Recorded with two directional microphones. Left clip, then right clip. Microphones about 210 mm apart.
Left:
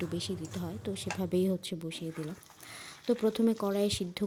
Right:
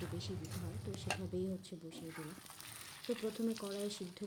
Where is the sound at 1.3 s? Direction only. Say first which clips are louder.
Left 15 dB; 45° left (ahead or behind).